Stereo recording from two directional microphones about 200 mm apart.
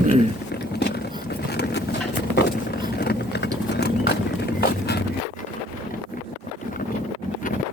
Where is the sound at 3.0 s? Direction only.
55° left (ahead or behind).